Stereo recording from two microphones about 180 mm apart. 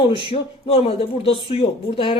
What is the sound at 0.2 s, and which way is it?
Speech, 30° left (ahead or behind).